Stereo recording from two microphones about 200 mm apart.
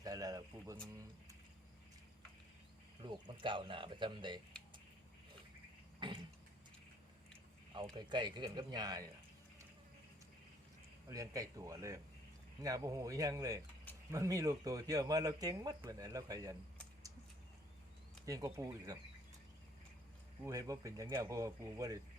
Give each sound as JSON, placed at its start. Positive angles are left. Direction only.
{"t": 0.0, "sound": "a sound", "side_deg": -20}
{"t": 3.0, "sound": "speech", "side_deg": -25}
{"t": 6.0, "sound": "a sound", "side_deg": -25}
{"t": 7.9, "sound": "speech", "side_deg": -20}
{"t": 11.1, "sound": "speech", "side_deg": -15}
{"t": 18.3, "sound": "speech", "side_deg": -15}
{"t": 20.4, "sound": "speech", "side_deg": -15}